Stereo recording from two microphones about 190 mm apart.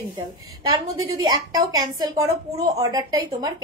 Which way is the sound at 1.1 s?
20° right (ahead or behind).